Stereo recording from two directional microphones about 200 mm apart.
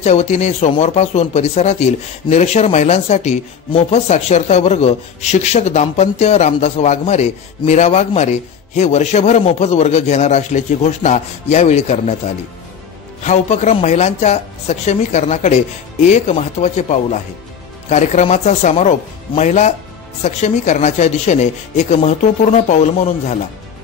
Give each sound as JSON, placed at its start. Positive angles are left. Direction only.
{"t": 0.0, "sound": "speech", "side_deg": 35}
{"t": 13.2, "sound": "speech", "side_deg": 35}